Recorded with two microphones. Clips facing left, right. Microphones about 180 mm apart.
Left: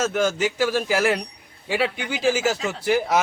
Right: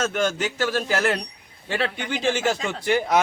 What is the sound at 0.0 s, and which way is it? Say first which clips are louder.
A man's voice: left 2 dB; 5° left (ahead or behind).